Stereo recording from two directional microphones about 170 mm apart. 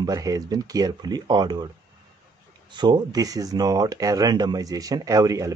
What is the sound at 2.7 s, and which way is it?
Speech, 25° right (ahead or behind).